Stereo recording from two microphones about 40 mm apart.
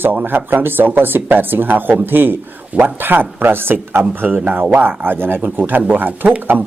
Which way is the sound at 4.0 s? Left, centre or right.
Right.